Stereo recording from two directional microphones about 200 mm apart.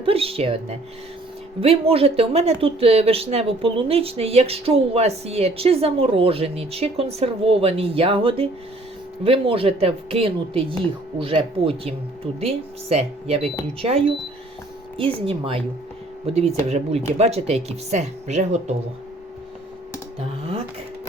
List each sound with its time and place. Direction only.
0.0 s speech: 30° right (ahead or behind)